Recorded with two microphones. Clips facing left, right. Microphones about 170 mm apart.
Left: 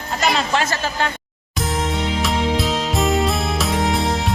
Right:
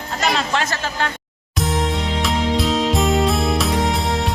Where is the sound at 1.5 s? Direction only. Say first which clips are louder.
Right 1 dB; centre (ahead or behind).